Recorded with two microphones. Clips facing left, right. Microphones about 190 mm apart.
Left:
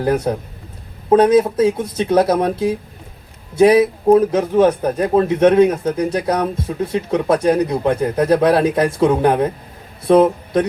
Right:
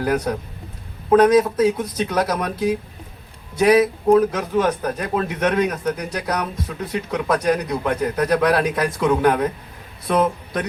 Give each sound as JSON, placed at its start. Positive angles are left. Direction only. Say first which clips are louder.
{"t": 0.0, "sound": "speech", "louder": "left 3 dB", "side_deg": 30}